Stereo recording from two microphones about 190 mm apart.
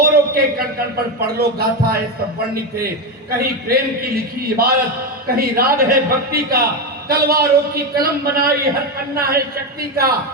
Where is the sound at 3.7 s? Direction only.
50° right (ahead or behind).